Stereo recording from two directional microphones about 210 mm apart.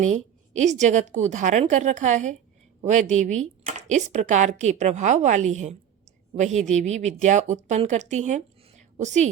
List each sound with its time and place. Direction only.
0.0 s speech: 35° right (ahead or behind)